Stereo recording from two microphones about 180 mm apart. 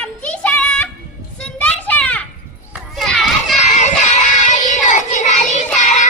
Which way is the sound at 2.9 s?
Centre (ahead or behind).